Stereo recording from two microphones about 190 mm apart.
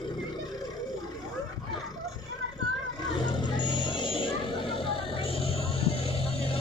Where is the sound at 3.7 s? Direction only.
25° left (ahead or behind).